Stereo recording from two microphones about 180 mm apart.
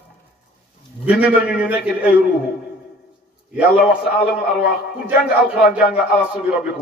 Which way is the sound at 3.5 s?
5° right (ahead or behind).